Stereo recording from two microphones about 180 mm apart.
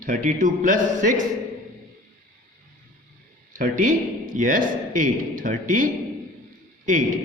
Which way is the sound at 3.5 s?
45° right (ahead or behind).